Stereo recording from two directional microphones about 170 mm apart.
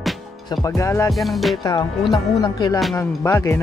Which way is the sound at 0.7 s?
20° left (ahead or behind).